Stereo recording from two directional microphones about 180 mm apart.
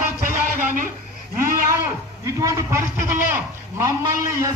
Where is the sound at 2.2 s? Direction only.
15° right (ahead or behind).